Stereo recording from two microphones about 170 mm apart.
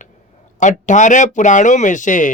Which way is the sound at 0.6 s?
45° left (ahead or behind).